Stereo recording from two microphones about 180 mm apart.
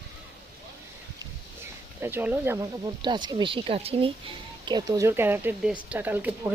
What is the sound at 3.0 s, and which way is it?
A woman's voice, 25° right (ahead or behind).